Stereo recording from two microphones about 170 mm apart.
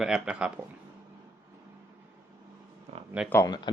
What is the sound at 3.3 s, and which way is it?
Speech, 20° left (ahead or behind).